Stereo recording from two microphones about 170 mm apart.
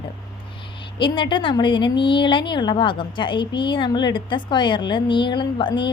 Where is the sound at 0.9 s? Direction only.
30° left (ahead or behind).